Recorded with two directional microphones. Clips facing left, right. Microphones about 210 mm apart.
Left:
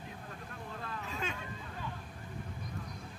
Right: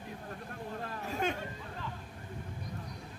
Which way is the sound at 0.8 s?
45° right (ahead or behind).